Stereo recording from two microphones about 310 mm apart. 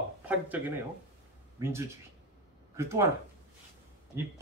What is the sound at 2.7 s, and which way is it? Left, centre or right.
Speech, centre.